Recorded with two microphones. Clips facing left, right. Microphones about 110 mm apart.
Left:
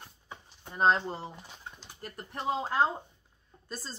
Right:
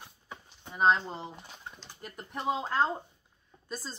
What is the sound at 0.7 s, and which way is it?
Speech, centre (ahead or behind).